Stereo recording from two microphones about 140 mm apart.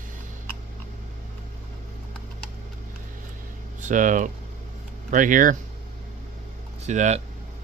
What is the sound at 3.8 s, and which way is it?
Speech, 65° right (ahead or behind).